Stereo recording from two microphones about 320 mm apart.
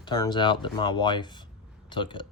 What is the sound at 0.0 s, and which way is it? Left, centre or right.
A man's voice, centre.